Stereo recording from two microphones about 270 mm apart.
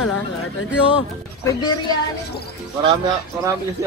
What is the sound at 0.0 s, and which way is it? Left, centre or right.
Speech, left.